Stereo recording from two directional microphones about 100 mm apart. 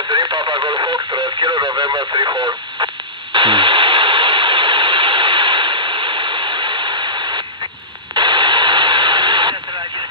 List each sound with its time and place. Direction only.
0.1 s radio: 45° right (ahead or behind)